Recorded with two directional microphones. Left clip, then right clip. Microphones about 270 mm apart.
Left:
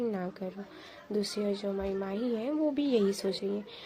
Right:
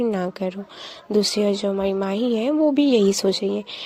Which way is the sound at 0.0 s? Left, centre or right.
Right.